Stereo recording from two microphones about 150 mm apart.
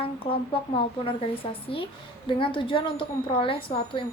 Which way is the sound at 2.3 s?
35° left (ahead or behind).